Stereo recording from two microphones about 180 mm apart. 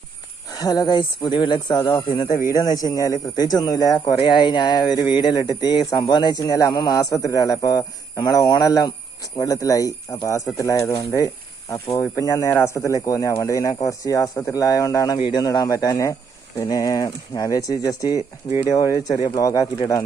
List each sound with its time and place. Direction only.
0.5 s speech: 20° left (ahead or behind)
4.9 s speech: 10° right (ahead or behind)
5.2 s speech: 20° left (ahead or behind)
18.2 s speech: 15° right (ahead or behind)
18.9 s speech: 20° left (ahead or behind)